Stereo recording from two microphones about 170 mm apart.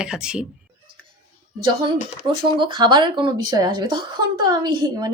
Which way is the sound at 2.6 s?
25° right (ahead or behind).